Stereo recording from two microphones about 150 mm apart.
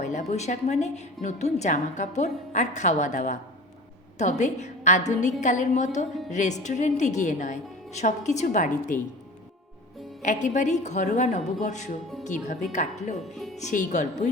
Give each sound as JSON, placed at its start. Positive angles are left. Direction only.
{"t": 0.0, "sound": "a woman's voice", "side_deg": 50}
{"t": 10.2, "sound": "a woman's voice", "side_deg": 55}
{"t": 13.3, "sound": "speech", "side_deg": 0}
{"t": 13.6, "sound": "a woman's voice", "side_deg": 55}